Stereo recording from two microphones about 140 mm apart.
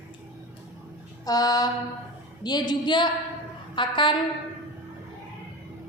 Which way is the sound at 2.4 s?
30° left (ahead or behind).